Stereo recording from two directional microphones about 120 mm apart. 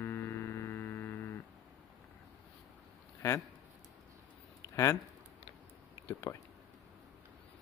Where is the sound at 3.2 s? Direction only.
20° left (ahead or behind).